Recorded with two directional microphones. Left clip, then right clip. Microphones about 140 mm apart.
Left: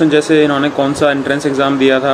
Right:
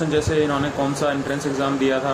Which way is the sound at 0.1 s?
50° left (ahead or behind).